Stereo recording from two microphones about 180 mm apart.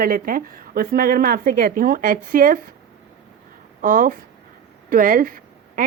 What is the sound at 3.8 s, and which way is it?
A woman's voice, 50° right (ahead or behind).